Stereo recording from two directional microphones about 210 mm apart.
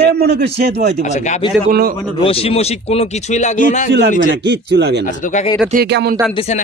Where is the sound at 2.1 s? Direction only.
25° left (ahead or behind).